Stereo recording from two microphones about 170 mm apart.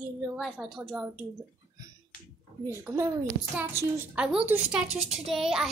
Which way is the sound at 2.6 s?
15° right (ahead or behind).